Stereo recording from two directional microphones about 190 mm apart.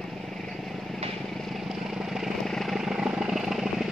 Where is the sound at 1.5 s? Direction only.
Centre (ahead or behind).